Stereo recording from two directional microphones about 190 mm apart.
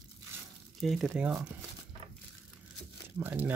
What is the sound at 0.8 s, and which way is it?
Speech, centre (ahead or behind).